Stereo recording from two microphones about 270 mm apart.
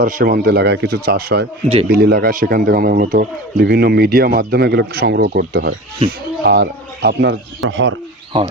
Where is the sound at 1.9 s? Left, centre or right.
Right.